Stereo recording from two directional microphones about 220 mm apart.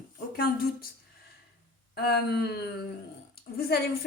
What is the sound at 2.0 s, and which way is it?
Speech, 45° left (ahead or behind).